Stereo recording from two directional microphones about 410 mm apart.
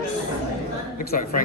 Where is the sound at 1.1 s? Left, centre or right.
Centre.